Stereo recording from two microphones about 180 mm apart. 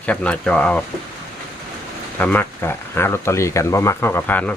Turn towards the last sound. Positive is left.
turn(degrees=10)  # may be behind; listen again after turning